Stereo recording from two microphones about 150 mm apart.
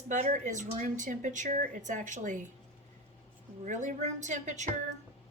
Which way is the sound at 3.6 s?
55° right (ahead or behind).